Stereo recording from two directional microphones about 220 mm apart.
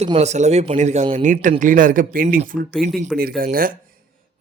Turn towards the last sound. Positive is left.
turn(degrees=-40)  # may be behind; listen again after turning